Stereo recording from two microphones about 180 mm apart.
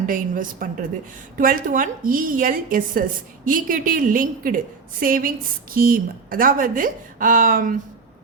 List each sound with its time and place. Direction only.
0.0 s a woman's voice: 50° right (ahead or behind)